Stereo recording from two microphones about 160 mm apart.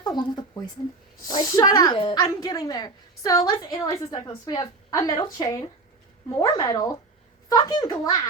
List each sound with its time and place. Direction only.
0.0 s a woman's voice: 25° left (ahead or behind)